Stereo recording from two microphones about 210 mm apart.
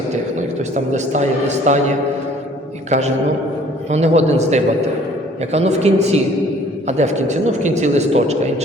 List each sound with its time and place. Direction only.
1.7 s a woman's voice: 35° right (ahead or behind)
3.9 s a woman's voice: 30° right (ahead or behind)